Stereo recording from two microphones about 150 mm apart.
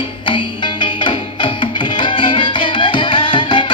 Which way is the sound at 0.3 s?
35° left (ahead or behind).